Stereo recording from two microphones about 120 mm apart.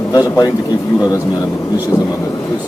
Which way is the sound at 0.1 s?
30° left (ahead or behind).